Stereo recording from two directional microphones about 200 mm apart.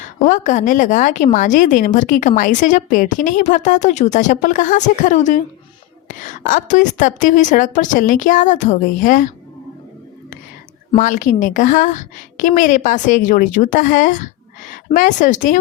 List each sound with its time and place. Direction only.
0.0 s a woman's voice: 40° left (ahead or behind)
10.9 s a woman's voice: 40° left (ahead or behind)